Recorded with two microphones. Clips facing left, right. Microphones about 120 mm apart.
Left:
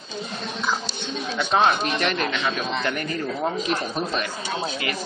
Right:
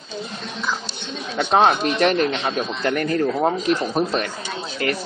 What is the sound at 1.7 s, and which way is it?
Speech, 45° right (ahead or behind).